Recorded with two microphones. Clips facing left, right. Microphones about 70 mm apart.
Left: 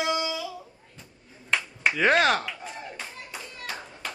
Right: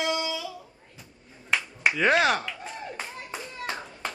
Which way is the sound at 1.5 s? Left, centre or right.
Centre.